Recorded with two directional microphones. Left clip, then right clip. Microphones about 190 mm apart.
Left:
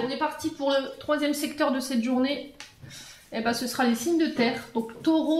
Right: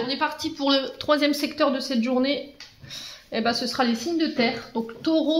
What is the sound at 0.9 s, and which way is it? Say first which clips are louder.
A woman's voice: right 5 dB; 55° right (ahead or behind).